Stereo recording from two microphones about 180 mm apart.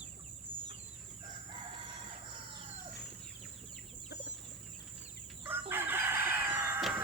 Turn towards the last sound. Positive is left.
turn(degrees=-10)  # may be behind; listen again after turning